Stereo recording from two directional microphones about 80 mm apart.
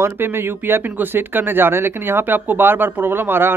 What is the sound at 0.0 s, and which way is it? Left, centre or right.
Speech, right.